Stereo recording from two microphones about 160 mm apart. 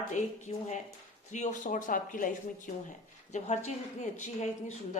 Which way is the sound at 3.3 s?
45° left (ahead or behind).